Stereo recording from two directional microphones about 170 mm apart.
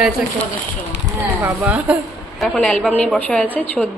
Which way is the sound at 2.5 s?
5° left (ahead or behind).